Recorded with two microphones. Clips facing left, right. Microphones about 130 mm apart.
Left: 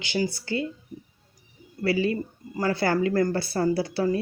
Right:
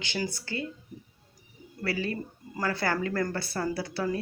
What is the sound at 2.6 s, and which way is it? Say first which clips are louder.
Speech: left 5 dB; 30° left (ahead or behind).